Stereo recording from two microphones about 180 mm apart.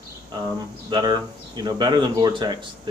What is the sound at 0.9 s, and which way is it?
Speech, 25° right (ahead or behind).